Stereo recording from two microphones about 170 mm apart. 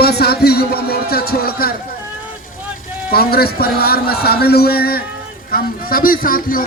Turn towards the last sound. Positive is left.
turn(degrees=55)  # may be behind; listen again after turning